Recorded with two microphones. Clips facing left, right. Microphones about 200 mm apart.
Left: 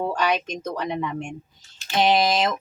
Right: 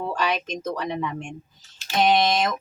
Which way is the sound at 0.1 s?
Centre (ahead or behind).